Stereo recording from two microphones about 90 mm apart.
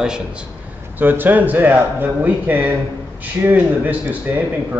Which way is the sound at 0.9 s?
20° right (ahead or behind).